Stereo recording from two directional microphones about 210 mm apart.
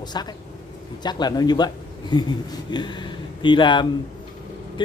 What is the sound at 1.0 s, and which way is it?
Speech, 20° left (ahead or behind).